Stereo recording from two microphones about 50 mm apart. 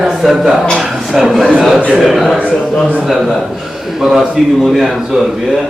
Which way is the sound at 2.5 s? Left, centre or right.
Centre.